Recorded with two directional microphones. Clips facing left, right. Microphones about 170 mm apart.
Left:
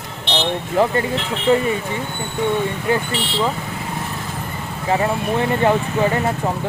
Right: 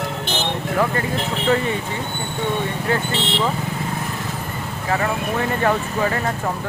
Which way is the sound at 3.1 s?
25° right (ahead or behind).